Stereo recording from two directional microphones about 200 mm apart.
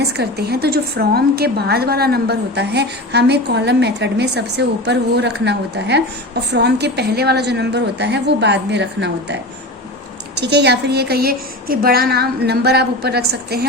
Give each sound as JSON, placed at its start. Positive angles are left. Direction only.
{"t": 0.2, "sound": "a woman's voice", "side_deg": -55}